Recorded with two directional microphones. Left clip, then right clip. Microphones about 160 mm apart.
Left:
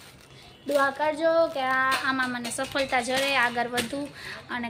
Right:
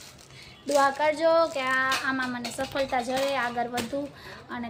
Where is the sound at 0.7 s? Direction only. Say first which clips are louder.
Right 2 dB; 10° right (ahead or behind).